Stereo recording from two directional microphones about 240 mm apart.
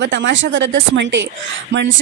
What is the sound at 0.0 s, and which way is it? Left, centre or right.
A woman's voice, right.